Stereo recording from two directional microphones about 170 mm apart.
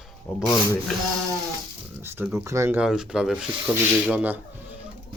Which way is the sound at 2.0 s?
15° right (ahead or behind).